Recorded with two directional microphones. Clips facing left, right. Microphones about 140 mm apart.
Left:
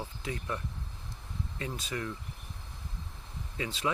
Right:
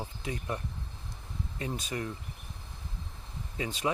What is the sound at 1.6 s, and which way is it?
Speech, 15° right (ahead or behind).